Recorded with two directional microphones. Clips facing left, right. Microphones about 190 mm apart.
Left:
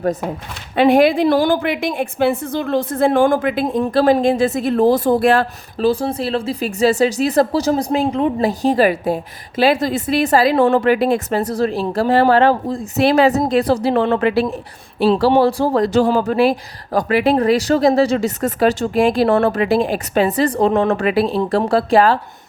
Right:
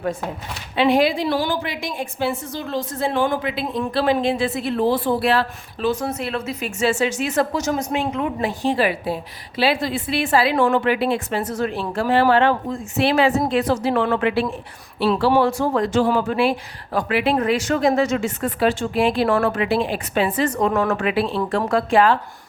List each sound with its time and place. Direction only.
0.8 s a woman's voice: 50° left (ahead or behind)